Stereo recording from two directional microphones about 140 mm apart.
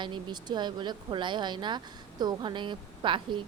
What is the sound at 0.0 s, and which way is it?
A woman's voice, 30° right (ahead or behind).